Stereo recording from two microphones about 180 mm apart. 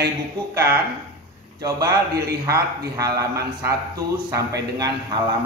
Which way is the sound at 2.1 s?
60° right (ahead or behind).